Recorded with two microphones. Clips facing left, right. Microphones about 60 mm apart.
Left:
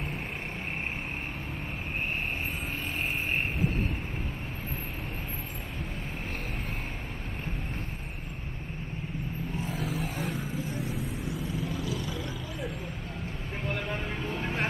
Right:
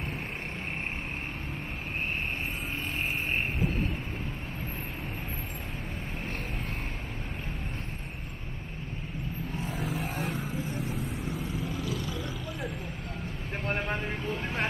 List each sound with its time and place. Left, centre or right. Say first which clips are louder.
9.7 s vehicle: right 1 dB; centre
13.7 s vehicle: right 2 dB; right
14.2 s vehicle: even; centre